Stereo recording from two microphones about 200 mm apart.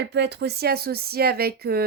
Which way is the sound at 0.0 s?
60° right (ahead or behind).